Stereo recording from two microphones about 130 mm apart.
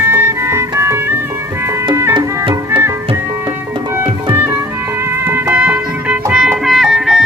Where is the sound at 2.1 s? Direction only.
35° right (ahead or behind).